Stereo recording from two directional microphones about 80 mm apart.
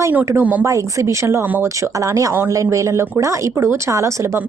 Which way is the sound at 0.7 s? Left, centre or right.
Right.